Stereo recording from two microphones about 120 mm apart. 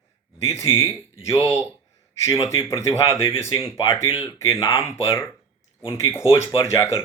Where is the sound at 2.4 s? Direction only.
30° left (ahead or behind).